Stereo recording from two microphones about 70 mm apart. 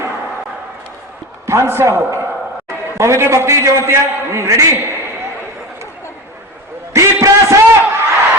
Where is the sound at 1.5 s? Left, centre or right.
Right.